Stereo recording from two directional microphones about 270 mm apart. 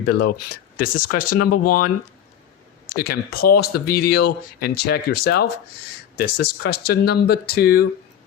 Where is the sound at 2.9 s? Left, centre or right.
Left.